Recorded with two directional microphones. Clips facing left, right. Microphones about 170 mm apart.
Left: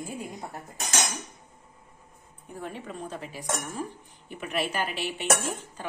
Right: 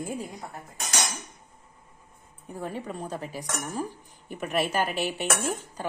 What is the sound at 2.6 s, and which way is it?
A woman's voice, 40° right (ahead or behind).